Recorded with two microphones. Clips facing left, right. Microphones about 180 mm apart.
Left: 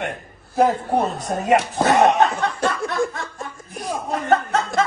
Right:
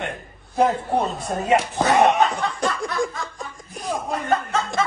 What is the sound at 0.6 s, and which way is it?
Speech, centre (ahead or behind).